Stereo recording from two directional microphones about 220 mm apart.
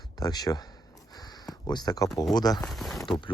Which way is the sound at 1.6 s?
20° left (ahead or behind).